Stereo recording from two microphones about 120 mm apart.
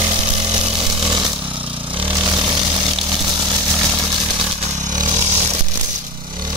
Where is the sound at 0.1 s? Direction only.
40° right (ahead or behind).